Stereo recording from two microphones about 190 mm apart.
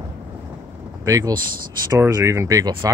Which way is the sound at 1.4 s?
50° right (ahead or behind).